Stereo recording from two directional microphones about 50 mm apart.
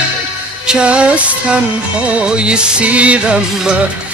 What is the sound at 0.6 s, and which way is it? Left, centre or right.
Music, centre.